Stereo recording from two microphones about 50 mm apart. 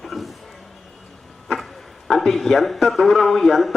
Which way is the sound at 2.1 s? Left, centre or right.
Centre.